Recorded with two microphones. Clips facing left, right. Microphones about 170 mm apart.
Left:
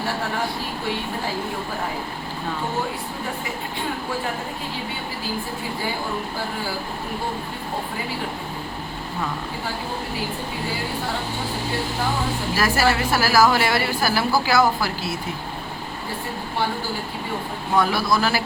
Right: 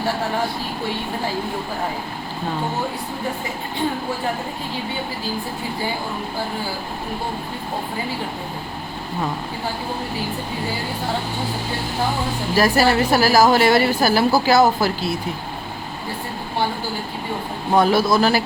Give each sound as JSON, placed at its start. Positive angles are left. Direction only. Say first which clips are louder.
{"t": 12.5, "sound": "a woman's voice", "louder": "right 5 dB", "side_deg": -20}
{"t": 17.7, "sound": "a woman's voice", "louder": "right 5 dB", "side_deg": -20}